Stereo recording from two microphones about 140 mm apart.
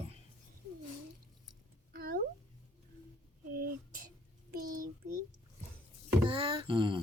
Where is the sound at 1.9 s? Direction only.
90° right.